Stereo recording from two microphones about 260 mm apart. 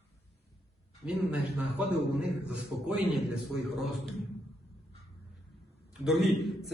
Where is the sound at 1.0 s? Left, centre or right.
Centre.